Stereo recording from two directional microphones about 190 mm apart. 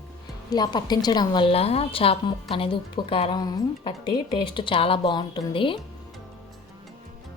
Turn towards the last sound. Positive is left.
turn(degrees=25)  # may be behind; listen again after turning